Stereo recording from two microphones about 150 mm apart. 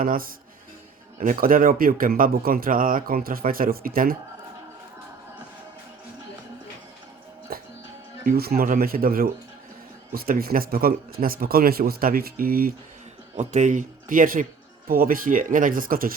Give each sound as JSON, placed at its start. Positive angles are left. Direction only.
{"t": 0.0, "sound": "speech", "side_deg": -70}
{"t": 7.5, "sound": "music", "side_deg": -85}
{"t": 8.3, "sound": "speech", "side_deg": -90}
{"t": 13.3, "sound": "speech", "side_deg": -50}